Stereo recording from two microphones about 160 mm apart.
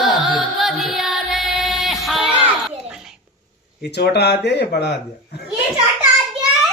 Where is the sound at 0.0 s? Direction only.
Centre (ahead or behind).